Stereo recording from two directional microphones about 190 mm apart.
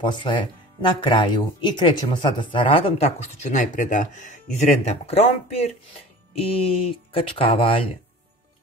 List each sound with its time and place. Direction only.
0.0 s speech: 25° left (ahead or behind)
3.5 s speech: 40° left (ahead or behind)